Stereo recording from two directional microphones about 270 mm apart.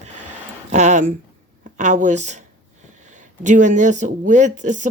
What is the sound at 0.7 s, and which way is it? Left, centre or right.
Speech, right.